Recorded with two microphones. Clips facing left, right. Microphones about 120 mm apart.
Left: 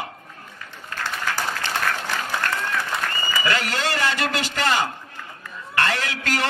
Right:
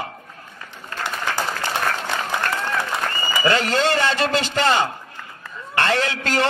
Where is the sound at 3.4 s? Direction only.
30° right (ahead or behind).